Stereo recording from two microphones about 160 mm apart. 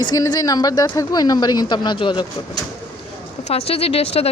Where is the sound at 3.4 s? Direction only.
40° left (ahead or behind).